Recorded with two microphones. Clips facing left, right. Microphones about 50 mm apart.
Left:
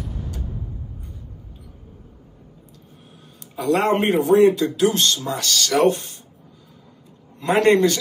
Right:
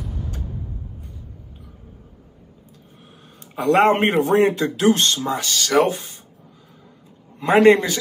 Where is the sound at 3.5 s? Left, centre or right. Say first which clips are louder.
Right 3 dB; right.